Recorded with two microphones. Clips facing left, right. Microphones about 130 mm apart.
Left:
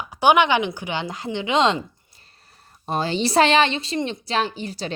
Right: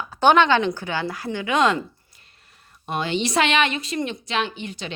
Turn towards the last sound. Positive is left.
turn(degrees=35)  # may be behind; listen again after turning